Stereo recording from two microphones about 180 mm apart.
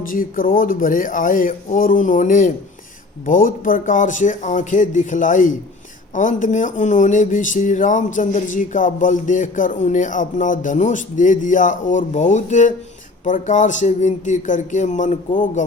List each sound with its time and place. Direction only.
0.1 s speech: 50° left (ahead or behind)